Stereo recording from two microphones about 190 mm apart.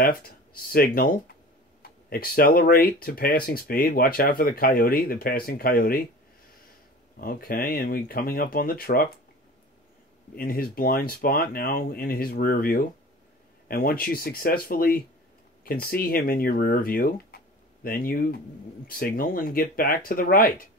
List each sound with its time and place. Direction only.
0.0 s speech: 50° left (ahead or behind)
7.2 s speech: 50° left (ahead or behind)
10.3 s speech: 50° left (ahead or behind)